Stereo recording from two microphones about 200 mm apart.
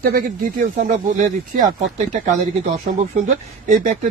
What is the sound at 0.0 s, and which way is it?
Speech, 45° right (ahead or behind).